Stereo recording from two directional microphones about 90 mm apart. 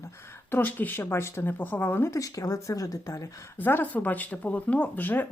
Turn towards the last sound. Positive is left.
turn(degrees=20)  # may be behind; listen again after turning